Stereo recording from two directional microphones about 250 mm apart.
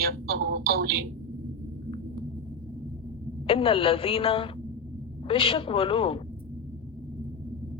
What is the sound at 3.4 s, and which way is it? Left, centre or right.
A woman's voice, left.